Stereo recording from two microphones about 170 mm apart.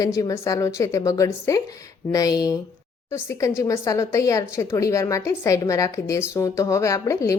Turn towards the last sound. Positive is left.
turn(degrees=20)  # may be behind; listen again after turning